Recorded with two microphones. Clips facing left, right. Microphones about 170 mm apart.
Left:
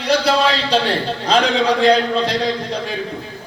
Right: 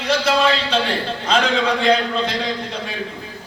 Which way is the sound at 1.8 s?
35° left (ahead or behind).